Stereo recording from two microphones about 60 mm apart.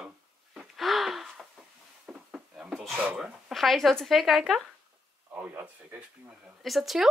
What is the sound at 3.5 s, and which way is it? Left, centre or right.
Speech, centre.